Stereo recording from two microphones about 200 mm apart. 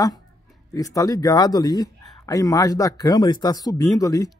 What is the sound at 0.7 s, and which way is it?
Speech, 15° left (ahead or behind).